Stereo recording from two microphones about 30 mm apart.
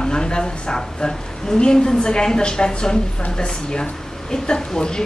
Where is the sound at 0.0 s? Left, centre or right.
Left.